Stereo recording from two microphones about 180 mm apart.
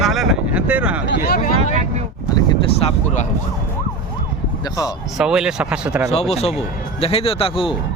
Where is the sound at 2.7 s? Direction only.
40° left (ahead or behind).